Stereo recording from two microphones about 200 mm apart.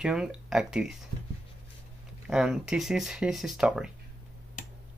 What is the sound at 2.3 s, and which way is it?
Speech, 5° right (ahead or behind).